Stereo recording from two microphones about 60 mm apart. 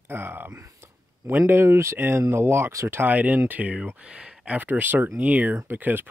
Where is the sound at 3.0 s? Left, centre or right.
Right.